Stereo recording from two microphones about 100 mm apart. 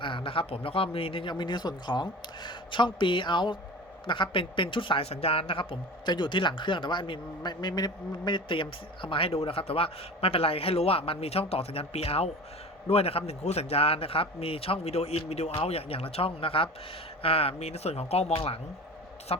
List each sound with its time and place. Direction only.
0.0 s a man's voice: 60° left (ahead or behind); by 18.6 s 75° left (ahead or behind)
19.3 s speech: 90° left